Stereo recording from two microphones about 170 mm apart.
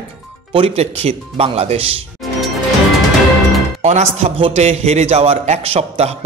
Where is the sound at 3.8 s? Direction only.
40° right (ahead or behind).